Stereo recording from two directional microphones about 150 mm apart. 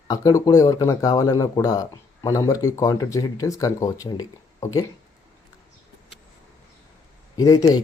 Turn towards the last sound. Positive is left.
turn(degrees=25)  # may be behind; listen again after turning